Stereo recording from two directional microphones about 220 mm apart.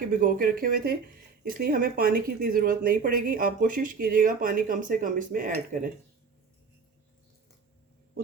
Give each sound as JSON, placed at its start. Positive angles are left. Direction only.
{"t": 0.2, "sound": "speech", "side_deg": -40}